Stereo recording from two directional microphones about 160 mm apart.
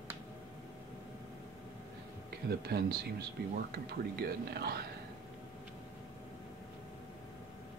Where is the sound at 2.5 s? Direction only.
85° right.